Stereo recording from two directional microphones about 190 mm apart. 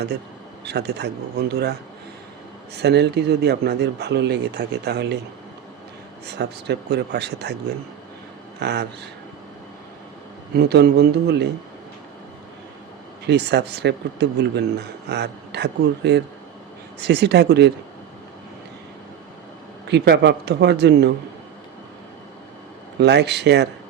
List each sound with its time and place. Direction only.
0.6 s speech: 60° right (ahead or behind)
2.7 s speech: 60° right (ahead or behind)
6.2 s speech: 60° right (ahead or behind)
8.5 s speech: 60° right (ahead or behind)
10.5 s speech: 60° right (ahead or behind)
13.2 s speech: 60° right (ahead or behind)
19.9 s speech: 60° right (ahead or behind)
23.0 s speech: 65° right (ahead or behind)